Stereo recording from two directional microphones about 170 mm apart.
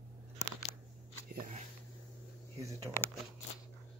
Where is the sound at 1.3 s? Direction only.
50° right (ahead or behind).